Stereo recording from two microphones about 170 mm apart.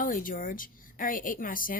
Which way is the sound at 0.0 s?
55° left (ahead or behind).